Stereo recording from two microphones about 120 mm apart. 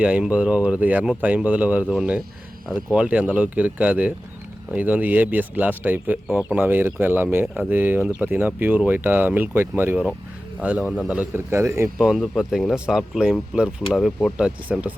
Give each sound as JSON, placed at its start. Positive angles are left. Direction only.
{"t": 0.0, "sound": "speech", "side_deg": -10}
{"t": 7.4, "sound": "speech", "side_deg": -5}
{"t": 7.7, "sound": "speech", "side_deg": -15}
{"t": 11.9, "sound": "speech", "side_deg": -5}
{"t": 14.3, "sound": "speech", "side_deg": -10}